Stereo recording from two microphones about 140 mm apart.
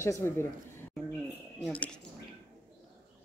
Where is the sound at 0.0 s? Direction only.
20° left (ahead or behind).